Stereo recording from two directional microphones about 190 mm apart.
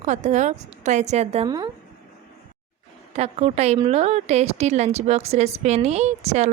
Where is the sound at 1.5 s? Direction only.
20° right (ahead or behind).